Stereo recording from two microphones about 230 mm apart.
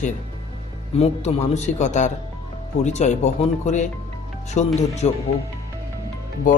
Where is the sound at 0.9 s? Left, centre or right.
Left.